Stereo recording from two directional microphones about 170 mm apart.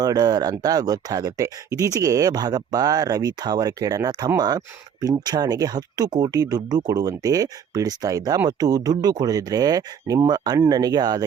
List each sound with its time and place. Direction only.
0.0 s speech: 20° right (ahead or behind)